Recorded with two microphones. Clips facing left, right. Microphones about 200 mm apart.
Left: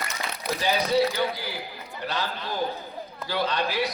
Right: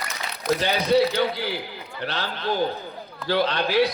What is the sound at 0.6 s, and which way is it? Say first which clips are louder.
A man's voice: right 2 dB; 70° right (ahead or behind).